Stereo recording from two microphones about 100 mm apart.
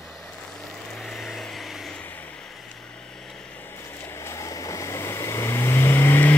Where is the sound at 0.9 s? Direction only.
Centre (ahead or behind).